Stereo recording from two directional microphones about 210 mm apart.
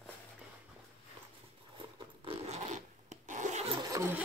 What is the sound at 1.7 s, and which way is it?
Rub, 25° right (ahead or behind).